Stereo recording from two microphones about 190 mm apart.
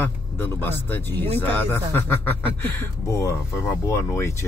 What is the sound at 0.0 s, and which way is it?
Speech, 10° left (ahead or behind).